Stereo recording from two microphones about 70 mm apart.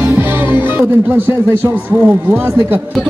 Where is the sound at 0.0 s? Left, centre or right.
Right.